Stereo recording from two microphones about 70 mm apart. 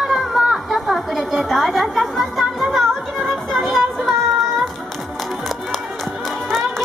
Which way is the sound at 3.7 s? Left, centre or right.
Centre.